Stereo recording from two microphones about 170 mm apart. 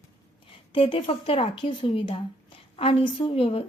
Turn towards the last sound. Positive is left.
turn(degrees=35)  # may be behind; listen again after turning